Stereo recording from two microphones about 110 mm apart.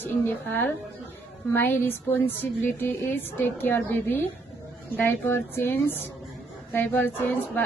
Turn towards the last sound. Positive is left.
turn(degrees=15)  # may be behind; listen again after turning